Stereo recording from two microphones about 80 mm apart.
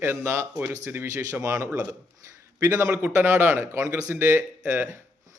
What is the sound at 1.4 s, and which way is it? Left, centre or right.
Speech, right.